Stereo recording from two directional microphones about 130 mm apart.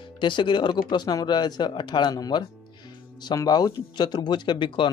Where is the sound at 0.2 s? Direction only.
35° left (ahead or behind).